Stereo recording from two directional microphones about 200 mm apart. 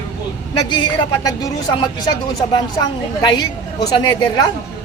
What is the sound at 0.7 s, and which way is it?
Speech, 20° left (ahead or behind).